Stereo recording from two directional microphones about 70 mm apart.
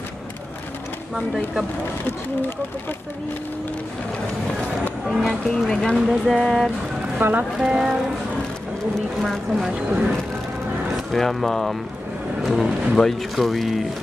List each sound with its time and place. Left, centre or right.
1.1 s speech: centre
5.0 s speech: centre
5.9 s speech: centre
7.2 s speech: right
7.5 s a sound: centre
9.2 s speech: centre
11.1 s speech: centre